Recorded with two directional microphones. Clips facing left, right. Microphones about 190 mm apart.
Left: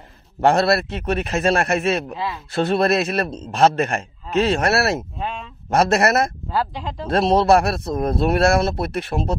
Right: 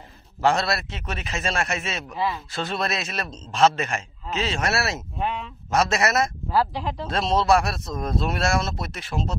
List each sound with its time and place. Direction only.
0.4 s speech: 60° left (ahead or behind)
6.5 s speech: 25° left (ahead or behind)
7.1 s speech: 60° left (ahead or behind)